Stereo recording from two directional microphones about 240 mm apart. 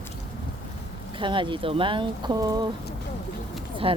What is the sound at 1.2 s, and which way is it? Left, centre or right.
Speech, right.